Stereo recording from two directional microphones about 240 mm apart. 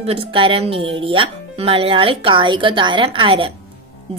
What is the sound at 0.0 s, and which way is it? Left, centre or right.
A woman's voice, right.